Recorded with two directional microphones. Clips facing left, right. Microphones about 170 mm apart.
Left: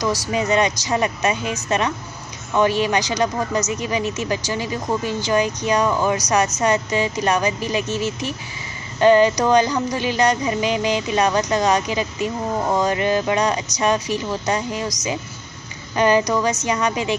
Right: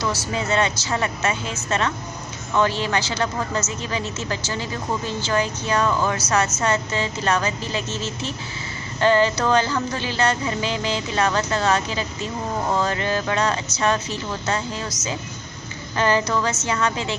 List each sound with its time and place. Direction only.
0.0 s speech: 15° left (ahead or behind)